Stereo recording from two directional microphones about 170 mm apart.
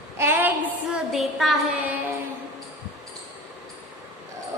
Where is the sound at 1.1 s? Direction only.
Centre (ahead or behind).